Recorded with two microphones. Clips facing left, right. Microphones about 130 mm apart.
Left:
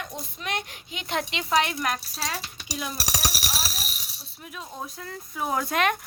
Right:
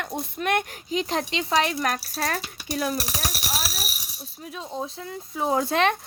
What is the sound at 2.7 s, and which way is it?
Speech, 50° right (ahead or behind).